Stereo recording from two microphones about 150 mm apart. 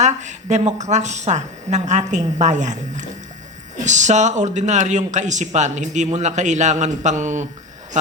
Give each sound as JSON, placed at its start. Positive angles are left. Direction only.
{"t": 0.0, "sound": "speech", "side_deg": -50}